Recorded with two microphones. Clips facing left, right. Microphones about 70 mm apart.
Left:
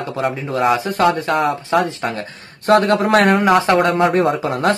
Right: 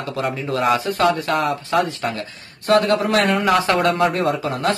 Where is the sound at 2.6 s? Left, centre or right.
Left.